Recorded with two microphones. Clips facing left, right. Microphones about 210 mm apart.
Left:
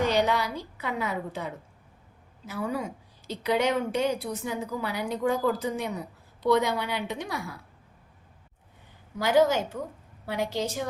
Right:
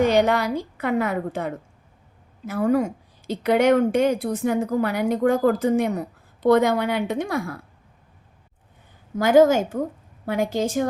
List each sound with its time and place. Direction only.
0.0 s a woman's voice: 55° right (ahead or behind)
9.1 s a woman's voice: 50° right (ahead or behind)